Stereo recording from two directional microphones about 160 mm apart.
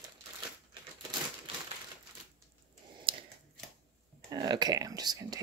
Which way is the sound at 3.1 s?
30° right (ahead or behind).